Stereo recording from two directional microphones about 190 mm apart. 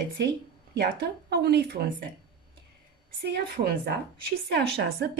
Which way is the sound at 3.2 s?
60° right (ahead or behind).